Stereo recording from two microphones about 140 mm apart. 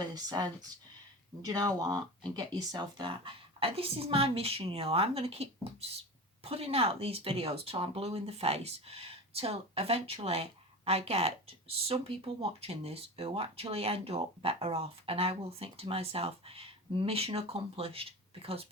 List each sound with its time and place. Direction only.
0.0 s speech: 30° right (ahead or behind); by 18.0 s 45° right (ahead or behind)